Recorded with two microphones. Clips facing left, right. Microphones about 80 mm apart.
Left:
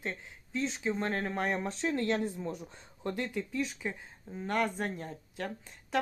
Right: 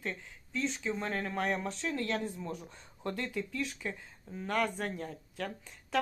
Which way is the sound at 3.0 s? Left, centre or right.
Centre.